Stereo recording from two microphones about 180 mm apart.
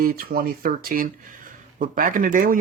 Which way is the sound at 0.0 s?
55° right (ahead or behind).